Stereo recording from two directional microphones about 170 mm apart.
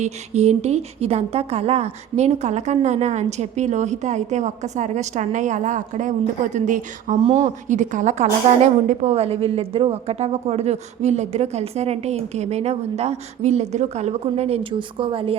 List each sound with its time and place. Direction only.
0.0 s a woman's voice: 40° right (ahead or behind)